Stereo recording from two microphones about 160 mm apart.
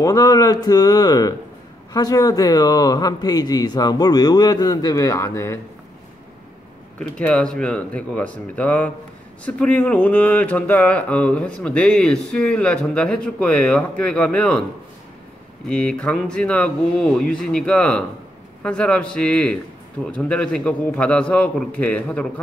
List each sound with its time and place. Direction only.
0.0 s speech: 20° left (ahead or behind)
7.0 s speech: 5° left (ahead or behind)
15.7 s speech: 5° left (ahead or behind)